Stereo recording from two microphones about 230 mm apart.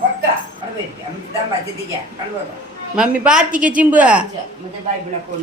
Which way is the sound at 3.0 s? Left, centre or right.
Centre.